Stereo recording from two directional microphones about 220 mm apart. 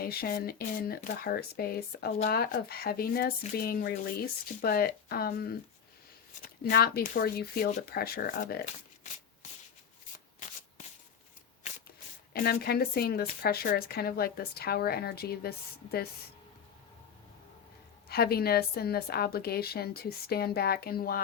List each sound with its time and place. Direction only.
0.0 s speech: 45° left (ahead or behind)
12.3 s speech: 45° left (ahead or behind)
18.1 s speech: 45° left (ahead or behind)